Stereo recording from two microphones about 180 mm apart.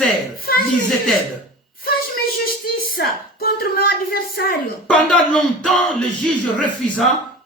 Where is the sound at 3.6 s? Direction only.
55° left (ahead or behind).